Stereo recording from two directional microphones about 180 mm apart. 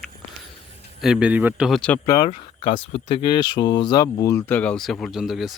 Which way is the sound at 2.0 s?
25° left (ahead or behind).